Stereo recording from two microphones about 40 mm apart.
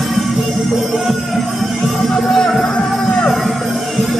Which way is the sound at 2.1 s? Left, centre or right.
Centre.